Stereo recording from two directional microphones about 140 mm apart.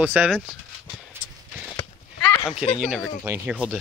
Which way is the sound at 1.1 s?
15° right (ahead or behind).